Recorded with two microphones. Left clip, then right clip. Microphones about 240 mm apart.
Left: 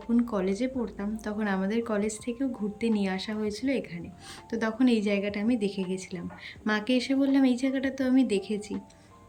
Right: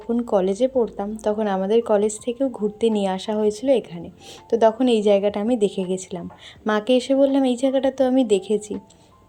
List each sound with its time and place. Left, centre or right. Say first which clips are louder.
0.1 s a woman's voice: right 8 dB; centre